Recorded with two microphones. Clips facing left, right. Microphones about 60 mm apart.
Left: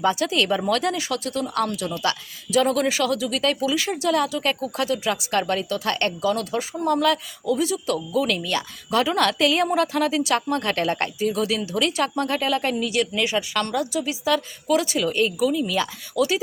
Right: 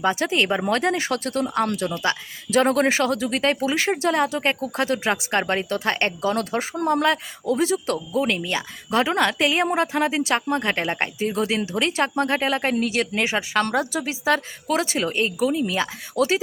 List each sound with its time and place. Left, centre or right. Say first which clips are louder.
0.2 s speech: even; right
1.9 s a woman's voice: right 1 dB; right
2.5 s speech: right 2 dB; right
6.3 s a woman's voice: right 1 dB; right; by 11.1 s centre
11.2 s a woman's voice: right 2 dB; right
16.1 s speech: even; right